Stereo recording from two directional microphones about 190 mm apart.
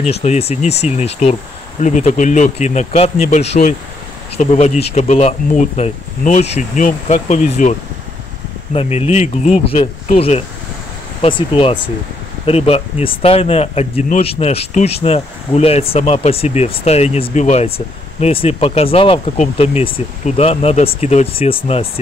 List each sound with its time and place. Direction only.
0.1 s speech: 35° left (ahead or behind)
8.7 s speech: 35° left (ahead or behind)